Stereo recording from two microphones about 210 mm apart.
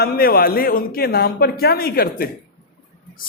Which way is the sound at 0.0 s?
45° left (ahead or behind).